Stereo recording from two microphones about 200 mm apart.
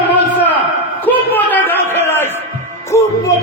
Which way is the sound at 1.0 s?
10° left (ahead or behind).